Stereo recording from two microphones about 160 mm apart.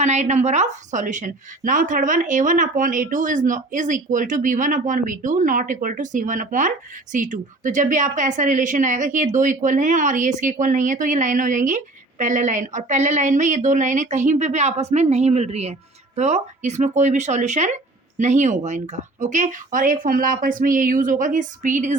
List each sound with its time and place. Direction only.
0.0 s a woman's voice: 45° right (ahead or behind)